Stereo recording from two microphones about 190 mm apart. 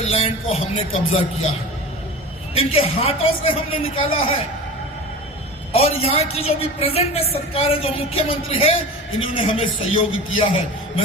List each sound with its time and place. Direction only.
0.0 s a sound: 30° left (ahead or behind)
0.5 s a woman's voice: 30° left (ahead or behind)
2.6 s a man's voice: 30° left (ahead or behind)
5.7 s a woman's voice: 30° left (ahead or behind)